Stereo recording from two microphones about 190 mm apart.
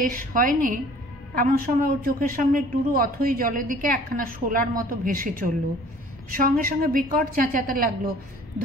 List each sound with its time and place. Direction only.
0.0 s a woman's voice: 45° right (ahead or behind)
6.4 s a woman's voice: 50° right (ahead or behind)